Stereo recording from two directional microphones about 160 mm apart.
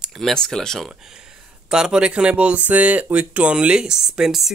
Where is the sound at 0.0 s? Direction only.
Centre (ahead or behind).